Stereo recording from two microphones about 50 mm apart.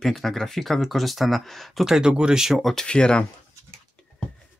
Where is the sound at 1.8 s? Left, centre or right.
Centre.